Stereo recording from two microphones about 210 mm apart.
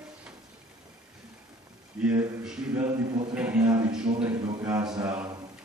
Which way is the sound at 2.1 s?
10° right (ahead or behind).